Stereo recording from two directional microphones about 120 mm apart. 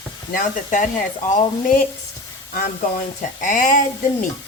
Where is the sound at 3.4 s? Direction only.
90° left.